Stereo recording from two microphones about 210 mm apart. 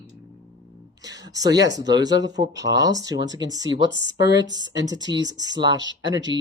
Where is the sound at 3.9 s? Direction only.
60° right (ahead or behind).